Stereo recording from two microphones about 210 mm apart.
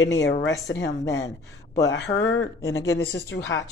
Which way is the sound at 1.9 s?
55° left (ahead or behind).